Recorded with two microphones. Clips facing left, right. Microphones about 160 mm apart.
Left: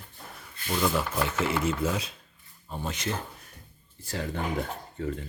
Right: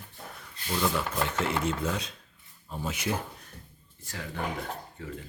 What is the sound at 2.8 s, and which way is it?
Speech, 10° right (ahead or behind).